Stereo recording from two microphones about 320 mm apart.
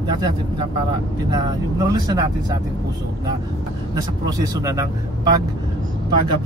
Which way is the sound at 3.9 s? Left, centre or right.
Centre.